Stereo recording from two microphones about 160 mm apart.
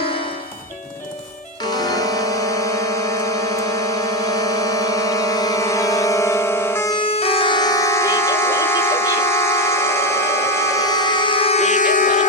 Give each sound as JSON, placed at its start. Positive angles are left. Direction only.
{"t": 1.6, "sound": "music", "side_deg": 25}
{"t": 3.8, "sound": "music", "side_deg": 20}
{"t": 6.9, "sound": "music", "side_deg": 35}